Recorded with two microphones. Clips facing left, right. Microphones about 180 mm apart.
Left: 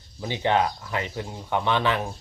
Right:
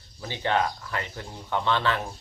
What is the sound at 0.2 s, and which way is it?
Speech, 15° left (ahead or behind).